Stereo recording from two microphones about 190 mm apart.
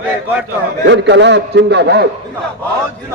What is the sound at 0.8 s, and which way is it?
A man's voice, 70° right (ahead or behind).